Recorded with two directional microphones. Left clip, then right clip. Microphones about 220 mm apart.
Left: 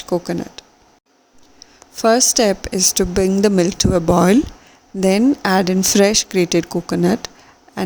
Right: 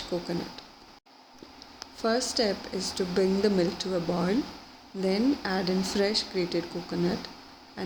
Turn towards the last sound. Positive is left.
turn(degrees=50)  # may be behind; listen again after turning